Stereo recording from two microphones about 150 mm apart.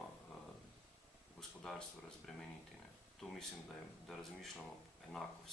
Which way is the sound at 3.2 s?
5° left (ahead or behind).